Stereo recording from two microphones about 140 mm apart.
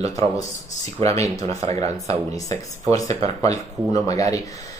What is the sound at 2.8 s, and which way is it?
Speech, 25° left (ahead or behind).